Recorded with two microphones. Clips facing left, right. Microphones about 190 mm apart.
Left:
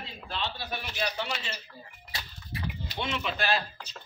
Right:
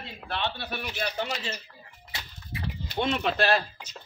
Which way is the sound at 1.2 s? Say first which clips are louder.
Right 3 dB; 40° right (ahead or behind).